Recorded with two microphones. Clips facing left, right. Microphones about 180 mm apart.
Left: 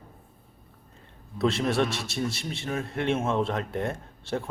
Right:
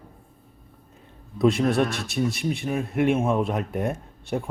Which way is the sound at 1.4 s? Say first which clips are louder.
Right 4 dB; 15° right (ahead or behind).